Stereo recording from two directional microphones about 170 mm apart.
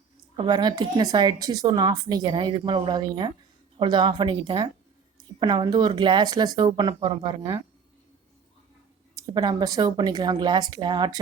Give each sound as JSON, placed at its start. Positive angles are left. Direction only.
{"t": 0.3, "sound": "a woman's voice", "side_deg": -25}
{"t": 9.1, "sound": "a woman's voice", "side_deg": -25}